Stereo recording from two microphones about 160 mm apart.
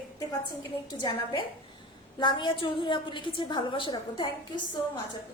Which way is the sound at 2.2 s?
30° left (ahead or behind).